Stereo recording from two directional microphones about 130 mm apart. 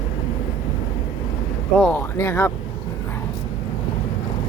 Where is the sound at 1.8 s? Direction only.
15° left (ahead or behind).